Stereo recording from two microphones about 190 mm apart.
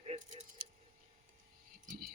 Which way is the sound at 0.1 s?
35° right (ahead or behind).